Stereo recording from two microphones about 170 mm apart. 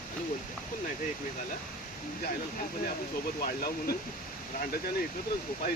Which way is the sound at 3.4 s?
60° left (ahead or behind).